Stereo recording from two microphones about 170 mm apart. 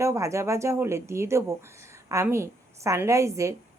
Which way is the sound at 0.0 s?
15° right (ahead or behind).